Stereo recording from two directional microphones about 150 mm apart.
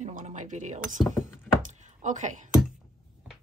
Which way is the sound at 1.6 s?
55° right (ahead or behind).